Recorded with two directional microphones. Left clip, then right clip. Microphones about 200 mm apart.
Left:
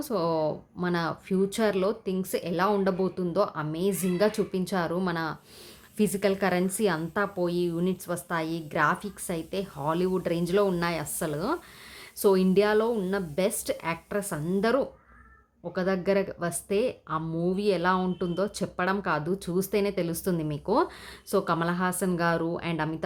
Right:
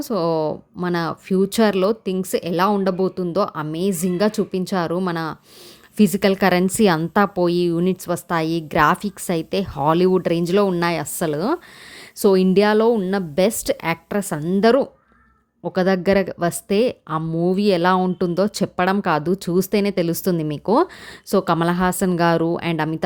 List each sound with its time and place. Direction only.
0.0 s a woman's voice: 35° right (ahead or behind)